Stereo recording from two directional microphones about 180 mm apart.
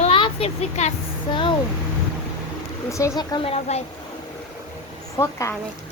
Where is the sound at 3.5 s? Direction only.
40° left (ahead or behind).